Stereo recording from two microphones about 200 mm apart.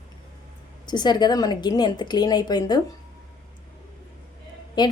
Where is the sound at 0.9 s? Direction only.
20° left (ahead or behind).